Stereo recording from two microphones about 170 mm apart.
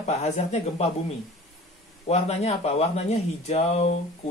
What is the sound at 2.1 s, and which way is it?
Speech, 40° left (ahead or behind).